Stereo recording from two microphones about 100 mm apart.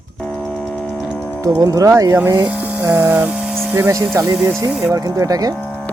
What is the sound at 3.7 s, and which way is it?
Speech, 30° right (ahead or behind).